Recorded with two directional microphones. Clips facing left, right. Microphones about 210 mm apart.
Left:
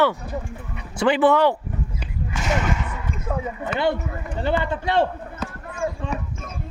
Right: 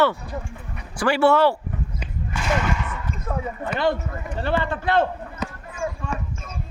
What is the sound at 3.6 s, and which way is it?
Speech, 20° left (ahead or behind).